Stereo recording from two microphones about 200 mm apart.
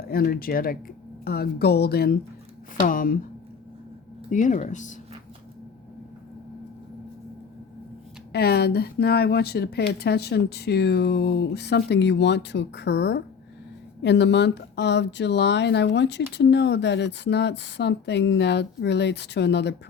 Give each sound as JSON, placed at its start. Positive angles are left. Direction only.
{"t": 0.1, "sound": "a woman's voice", "side_deg": 50}
{"t": 4.3, "sound": "speech", "side_deg": 40}
{"t": 8.3, "sound": "speech", "side_deg": 55}